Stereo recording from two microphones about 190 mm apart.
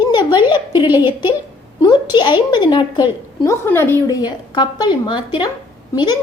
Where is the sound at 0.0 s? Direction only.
25° left (ahead or behind).